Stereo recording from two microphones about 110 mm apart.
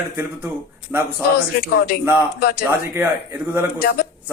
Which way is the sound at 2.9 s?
20° right (ahead or behind).